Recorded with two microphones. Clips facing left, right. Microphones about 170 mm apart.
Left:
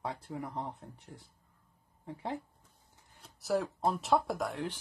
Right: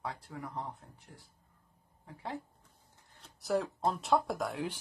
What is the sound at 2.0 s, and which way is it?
Speech, 20° left (ahead or behind).